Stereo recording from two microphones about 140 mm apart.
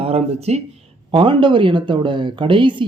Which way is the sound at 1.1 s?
35° right (ahead or behind).